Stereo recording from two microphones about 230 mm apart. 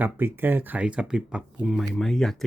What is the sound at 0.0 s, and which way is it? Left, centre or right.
Speech, centre.